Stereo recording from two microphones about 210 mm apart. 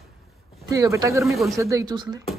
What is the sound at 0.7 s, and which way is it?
Speech, 15° right (ahead or behind).